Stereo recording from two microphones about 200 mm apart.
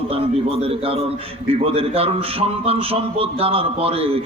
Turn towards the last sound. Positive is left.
turn(degrees=-30)  # may be behind; listen again after turning